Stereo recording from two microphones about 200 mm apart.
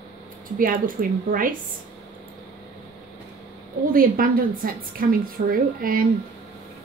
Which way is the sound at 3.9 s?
45° right (ahead or behind).